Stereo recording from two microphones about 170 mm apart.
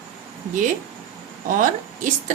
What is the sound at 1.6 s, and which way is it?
Speech, 50° right (ahead or behind).